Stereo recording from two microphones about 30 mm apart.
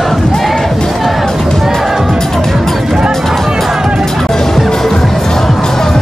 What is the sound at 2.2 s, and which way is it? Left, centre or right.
Music, centre.